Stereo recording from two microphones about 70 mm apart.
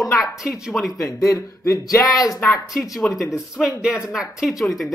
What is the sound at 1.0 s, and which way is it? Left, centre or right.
Speech, left.